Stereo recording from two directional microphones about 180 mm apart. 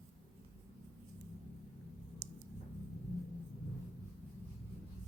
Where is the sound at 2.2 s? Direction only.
65° right (ahead or behind).